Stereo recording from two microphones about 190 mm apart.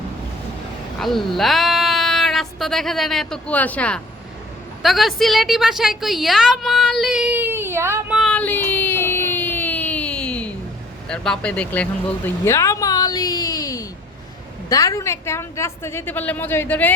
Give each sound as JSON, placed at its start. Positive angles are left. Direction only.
{"t": 0.9, "sound": "a woman's voice", "side_deg": 0}
{"t": 8.2, "sound": "a sound", "side_deg": 5}
{"t": 11.1, "sound": "a woman's voice", "side_deg": 5}